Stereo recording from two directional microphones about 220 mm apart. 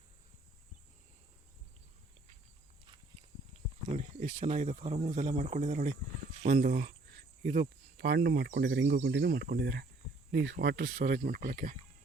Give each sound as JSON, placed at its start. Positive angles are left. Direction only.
{"t": 3.9, "sound": "speech", "side_deg": -35}
{"t": 7.9, "sound": "speech", "side_deg": -45}